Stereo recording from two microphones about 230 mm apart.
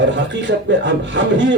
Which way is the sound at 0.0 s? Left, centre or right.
Right.